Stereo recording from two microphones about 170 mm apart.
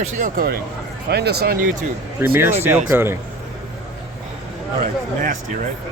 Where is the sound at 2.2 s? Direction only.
15° right (ahead or behind).